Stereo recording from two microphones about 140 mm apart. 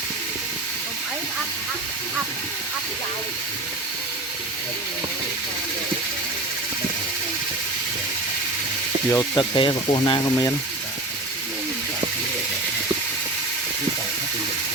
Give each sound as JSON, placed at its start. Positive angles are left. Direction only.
{"t": 9.0, "sound": "speech", "side_deg": 20}
{"t": 9.4, "sound": "speech", "side_deg": 35}